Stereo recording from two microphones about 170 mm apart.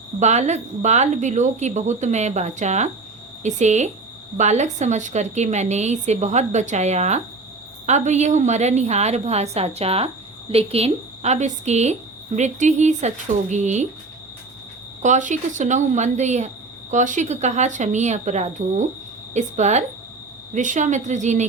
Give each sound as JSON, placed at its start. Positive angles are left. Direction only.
{"t": 0.2, "sound": "a woman's voice", "side_deg": -40}
{"t": 15.0, "sound": "a woman's voice", "side_deg": -45}